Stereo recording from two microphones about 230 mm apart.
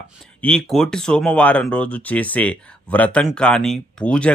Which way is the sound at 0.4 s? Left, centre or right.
Centre.